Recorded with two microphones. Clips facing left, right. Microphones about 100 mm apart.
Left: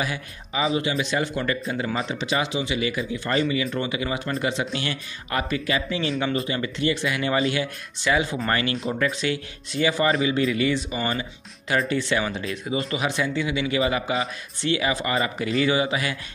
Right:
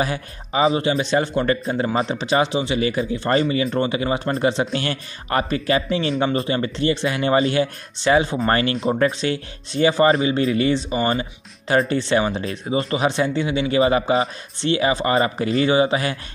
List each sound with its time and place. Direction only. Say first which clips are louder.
0.0 s speech: right 5 dB; 35° right (ahead or behind)